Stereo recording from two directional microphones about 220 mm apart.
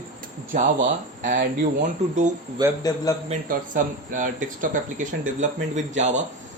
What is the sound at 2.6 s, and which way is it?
Speech, 20° right (ahead or behind).